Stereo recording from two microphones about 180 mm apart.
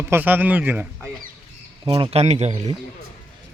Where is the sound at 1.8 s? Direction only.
30° right (ahead or behind).